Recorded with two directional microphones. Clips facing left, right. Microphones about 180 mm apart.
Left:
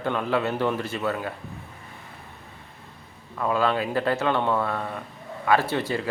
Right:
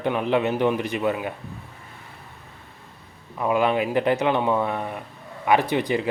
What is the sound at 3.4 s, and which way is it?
Speech, 15° right (ahead or behind).